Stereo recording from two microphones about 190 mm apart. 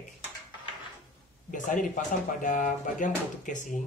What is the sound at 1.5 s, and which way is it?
Speech, 40° left (ahead or behind).